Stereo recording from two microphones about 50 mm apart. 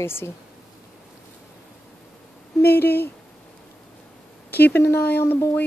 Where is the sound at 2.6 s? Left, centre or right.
Left.